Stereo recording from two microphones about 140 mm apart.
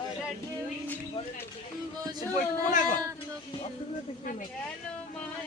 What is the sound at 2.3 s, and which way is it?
Speech, 70° left (ahead or behind).